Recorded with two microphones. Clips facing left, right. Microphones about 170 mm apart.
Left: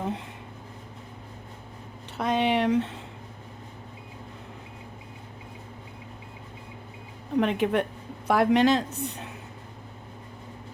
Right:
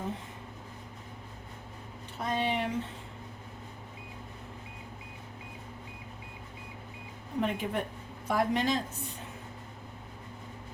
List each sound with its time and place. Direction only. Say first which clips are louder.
2.1 s a man's voice: left 7 dB; 75° left (ahead or behind)
7.3 s a man's voice: left 8 dB; 80° left